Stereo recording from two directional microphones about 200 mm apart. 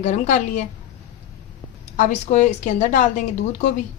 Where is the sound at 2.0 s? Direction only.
35° left (ahead or behind).